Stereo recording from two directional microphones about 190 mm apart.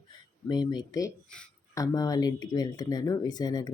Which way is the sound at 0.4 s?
20° left (ahead or behind).